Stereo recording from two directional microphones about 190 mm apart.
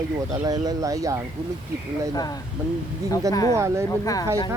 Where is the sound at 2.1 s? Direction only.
20° left (ahead or behind).